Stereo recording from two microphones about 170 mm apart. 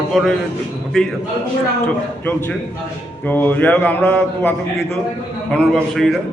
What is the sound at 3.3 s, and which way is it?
A man's voice, 10° left (ahead or behind).